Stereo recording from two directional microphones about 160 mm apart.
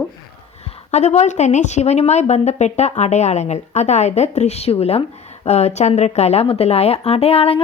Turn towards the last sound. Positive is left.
turn(degrees=40)  # may be behind; listen again after turning